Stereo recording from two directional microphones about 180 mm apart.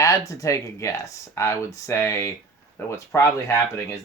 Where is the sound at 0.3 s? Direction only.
20° left (ahead or behind).